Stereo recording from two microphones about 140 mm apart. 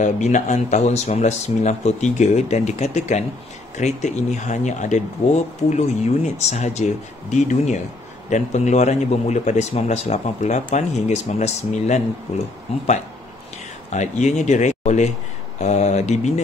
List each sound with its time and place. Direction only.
0.0 s a man's voice: 60° left (ahead or behind)
13.9 s speech: 60° left (ahead or behind)